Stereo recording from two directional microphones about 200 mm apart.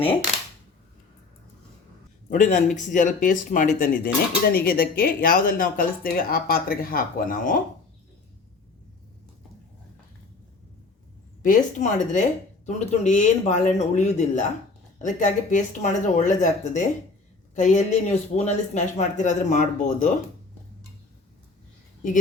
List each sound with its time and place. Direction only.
2.3 s speech: 40° left (ahead or behind)
11.4 s speech: 40° left (ahead or behind)